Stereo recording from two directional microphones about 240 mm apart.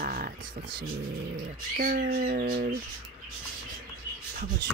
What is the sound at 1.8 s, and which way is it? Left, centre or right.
Speech, right.